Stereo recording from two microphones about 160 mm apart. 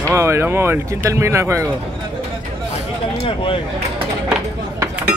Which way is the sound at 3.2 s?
35° left (ahead or behind).